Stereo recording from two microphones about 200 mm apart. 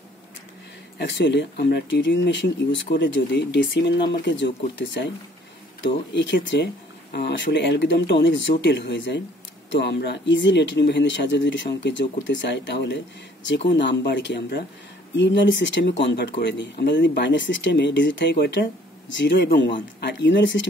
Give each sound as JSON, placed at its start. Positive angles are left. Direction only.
{"t": 0.9, "sound": "speech", "side_deg": 60}